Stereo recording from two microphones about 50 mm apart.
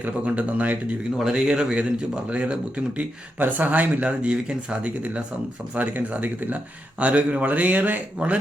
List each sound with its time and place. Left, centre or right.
0.0 s speech: right
1.2 s a man's voice: centre
3.3 s speech: right
5.7 s speech: right